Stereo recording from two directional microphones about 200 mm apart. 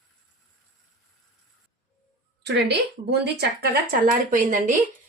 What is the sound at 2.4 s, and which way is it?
Speech, 55° right (ahead or behind).